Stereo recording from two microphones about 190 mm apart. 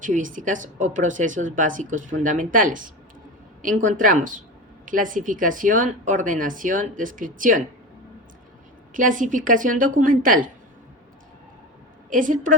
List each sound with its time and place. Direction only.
0.0 s speech: 45° right (ahead or behind)
8.9 s speech: 45° right (ahead or behind)
12.1 s speech: 45° right (ahead or behind)